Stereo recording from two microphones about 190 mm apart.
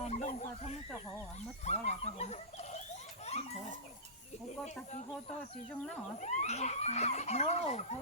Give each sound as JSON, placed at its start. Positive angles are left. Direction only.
{"t": 0.0, "sound": "a sound", "side_deg": 35}
{"t": 4.4, "sound": "speech", "side_deg": 35}
{"t": 6.1, "sound": "speech", "side_deg": 35}